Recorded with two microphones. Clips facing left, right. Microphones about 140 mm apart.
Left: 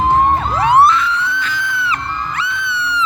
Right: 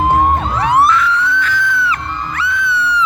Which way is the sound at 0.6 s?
25° left (ahead or behind).